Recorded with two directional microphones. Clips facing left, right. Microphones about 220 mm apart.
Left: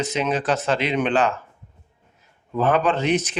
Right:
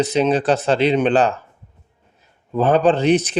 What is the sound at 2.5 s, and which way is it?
Speech, 35° right (ahead or behind).